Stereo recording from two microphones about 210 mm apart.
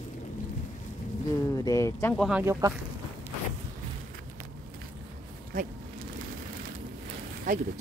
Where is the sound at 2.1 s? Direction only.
Centre (ahead or behind).